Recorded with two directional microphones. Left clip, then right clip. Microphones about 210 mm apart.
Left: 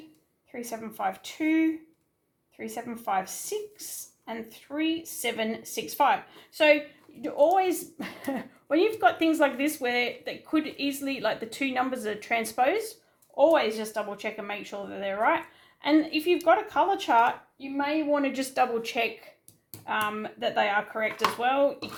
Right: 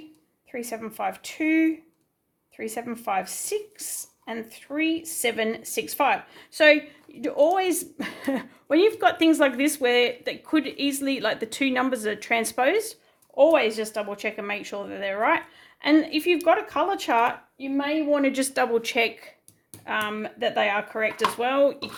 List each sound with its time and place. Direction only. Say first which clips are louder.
0.5 s a woman's voice: right 4 dB; 45° right (ahead or behind)